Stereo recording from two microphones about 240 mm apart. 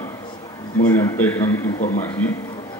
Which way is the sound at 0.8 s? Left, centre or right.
Centre.